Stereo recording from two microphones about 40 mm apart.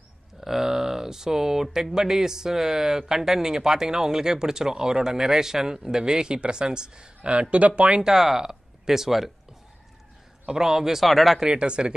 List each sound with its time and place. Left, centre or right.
0.4 s speech: centre; by 8.0 s right
8.0 s speech: centre
11.1 s speech: centre
11.4 s speech: right